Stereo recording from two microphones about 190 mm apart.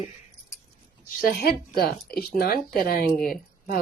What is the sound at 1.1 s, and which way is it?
A woman's voice, 45° left (ahead or behind).